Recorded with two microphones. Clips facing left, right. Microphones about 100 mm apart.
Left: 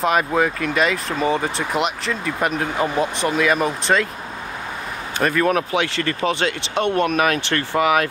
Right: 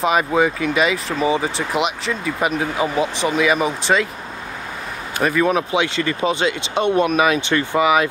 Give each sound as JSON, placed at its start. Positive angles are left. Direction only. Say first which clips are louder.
{"t": 0.0, "sound": "speech", "louder": "right 1 dB", "side_deg": 0}
{"t": 5.2, "sound": "speech", "louder": "right 1 dB", "side_deg": -5}
{"t": 5.5, "sound": "speech", "louder": "right 1 dB", "side_deg": -20}